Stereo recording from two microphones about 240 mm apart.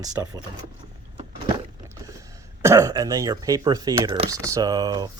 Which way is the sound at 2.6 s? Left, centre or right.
Centre.